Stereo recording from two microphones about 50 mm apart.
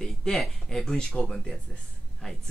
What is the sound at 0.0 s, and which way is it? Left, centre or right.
Speech, centre.